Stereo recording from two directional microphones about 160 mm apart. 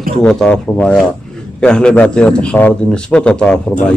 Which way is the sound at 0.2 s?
5° left (ahead or behind).